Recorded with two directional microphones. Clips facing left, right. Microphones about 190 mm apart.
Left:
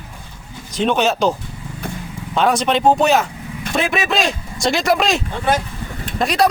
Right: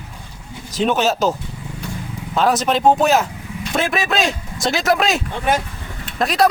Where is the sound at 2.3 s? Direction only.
Centre (ahead or behind).